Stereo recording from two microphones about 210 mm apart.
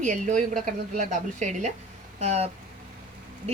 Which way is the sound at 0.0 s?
35° right (ahead or behind).